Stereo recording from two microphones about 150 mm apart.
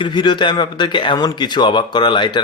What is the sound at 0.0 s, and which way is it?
Speech, 30° left (ahead or behind).